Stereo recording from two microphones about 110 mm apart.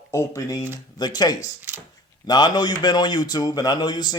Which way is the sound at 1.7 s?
15° right (ahead or behind).